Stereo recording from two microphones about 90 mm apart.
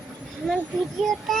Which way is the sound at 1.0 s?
Centre (ahead or behind).